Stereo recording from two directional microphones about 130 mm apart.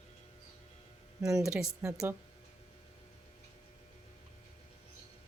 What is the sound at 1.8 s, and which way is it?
Speech, 20° right (ahead or behind).